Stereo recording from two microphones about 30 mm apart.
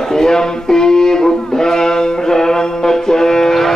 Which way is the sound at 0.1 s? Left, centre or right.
Centre.